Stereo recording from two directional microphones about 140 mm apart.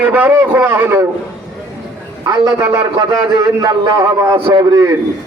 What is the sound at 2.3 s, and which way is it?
A man's voice, 20° right (ahead or behind).